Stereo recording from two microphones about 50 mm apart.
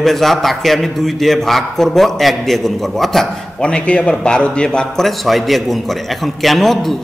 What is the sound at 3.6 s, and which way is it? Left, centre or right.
A man's voice, centre.